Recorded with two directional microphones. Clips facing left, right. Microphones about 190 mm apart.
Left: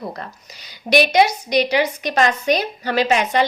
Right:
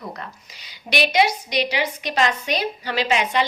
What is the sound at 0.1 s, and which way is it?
A woman's voice, 40° left (ahead or behind).